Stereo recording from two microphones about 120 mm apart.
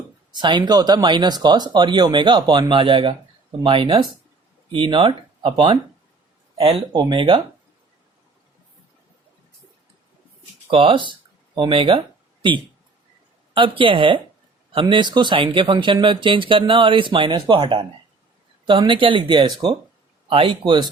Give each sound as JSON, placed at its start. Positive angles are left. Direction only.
{"t": 0.3, "sound": "speech", "side_deg": -40}
{"t": 6.9, "sound": "speech", "side_deg": -40}
{"t": 10.7, "sound": "speech", "side_deg": -45}
{"t": 13.5, "sound": "speech", "side_deg": -45}